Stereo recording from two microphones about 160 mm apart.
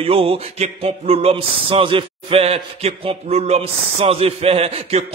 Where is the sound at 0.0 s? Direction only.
35° right (ahead or behind).